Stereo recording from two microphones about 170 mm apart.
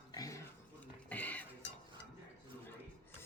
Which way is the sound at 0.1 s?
20° left (ahead or behind).